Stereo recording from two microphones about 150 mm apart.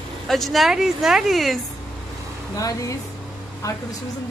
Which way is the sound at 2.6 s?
25° left (ahead or behind).